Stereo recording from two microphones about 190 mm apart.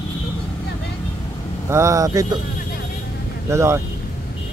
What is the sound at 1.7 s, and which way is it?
Speech, 15° right (ahead or behind).